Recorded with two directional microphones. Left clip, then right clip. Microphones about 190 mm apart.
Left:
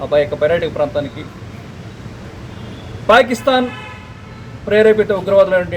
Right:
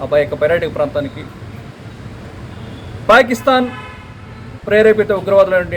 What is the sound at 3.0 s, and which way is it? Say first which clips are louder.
Speech: right 1 dB; centre (ahead or behind).